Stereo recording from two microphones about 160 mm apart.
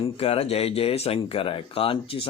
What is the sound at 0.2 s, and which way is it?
Speech, 40° left (ahead or behind).